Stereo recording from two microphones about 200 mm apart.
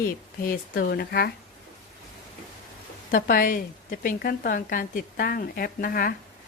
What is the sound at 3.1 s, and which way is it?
Speech, 45° left (ahead or behind).